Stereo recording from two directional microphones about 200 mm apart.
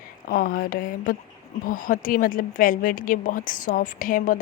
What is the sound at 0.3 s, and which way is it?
A woman's voice, 45° left (ahead or behind).